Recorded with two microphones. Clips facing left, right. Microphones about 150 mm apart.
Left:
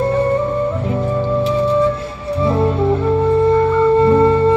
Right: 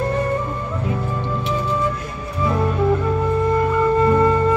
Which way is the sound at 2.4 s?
25° left (ahead or behind).